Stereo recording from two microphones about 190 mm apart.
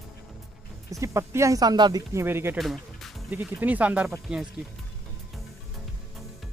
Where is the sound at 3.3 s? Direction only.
10° right (ahead or behind).